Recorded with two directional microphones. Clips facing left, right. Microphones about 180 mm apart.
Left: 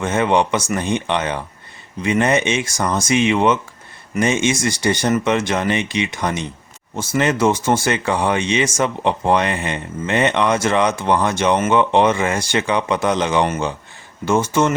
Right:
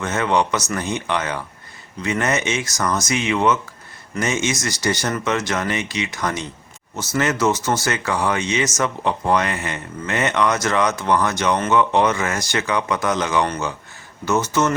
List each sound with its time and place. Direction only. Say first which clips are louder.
0.0 s speech: left 3 dB; 25° left (ahead or behind)
8.6 s speech: left 3 dB; 25° left (ahead or behind)